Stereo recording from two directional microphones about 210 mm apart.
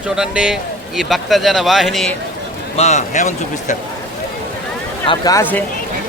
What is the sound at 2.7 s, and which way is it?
A man's voice, 30° left (ahead or behind).